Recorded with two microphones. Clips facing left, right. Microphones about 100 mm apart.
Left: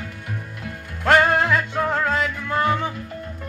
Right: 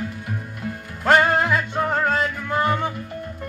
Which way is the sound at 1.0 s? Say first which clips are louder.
Even; 5° right (ahead or behind).